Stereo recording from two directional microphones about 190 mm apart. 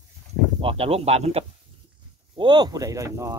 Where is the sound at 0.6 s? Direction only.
30° right (ahead or behind).